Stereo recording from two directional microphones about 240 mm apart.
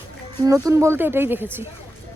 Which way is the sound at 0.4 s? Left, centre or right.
Centre.